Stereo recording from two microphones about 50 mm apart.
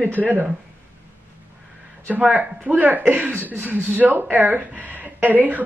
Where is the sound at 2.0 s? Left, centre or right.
Right.